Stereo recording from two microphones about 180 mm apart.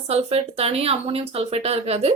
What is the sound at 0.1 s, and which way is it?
A woman's voice, 35° right (ahead or behind).